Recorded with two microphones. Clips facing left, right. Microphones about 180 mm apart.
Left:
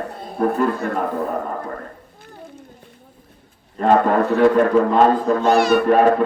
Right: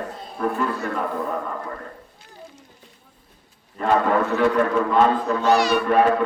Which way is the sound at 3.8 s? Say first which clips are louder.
Left 4 dB; 50° left (ahead or behind).